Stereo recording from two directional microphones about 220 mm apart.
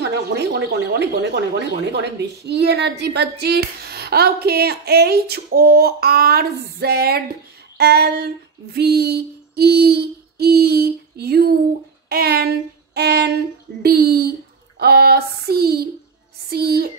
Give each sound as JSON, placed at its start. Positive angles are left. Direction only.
{"t": 0.0, "sound": "speech", "side_deg": -50}
{"t": 7.7, "sound": "female singing", "side_deg": -45}
{"t": 8.7, "sound": "speech", "side_deg": -45}
{"t": 12.1, "sound": "a sound", "side_deg": -45}
{"t": 13.8, "sound": "speech", "side_deg": -45}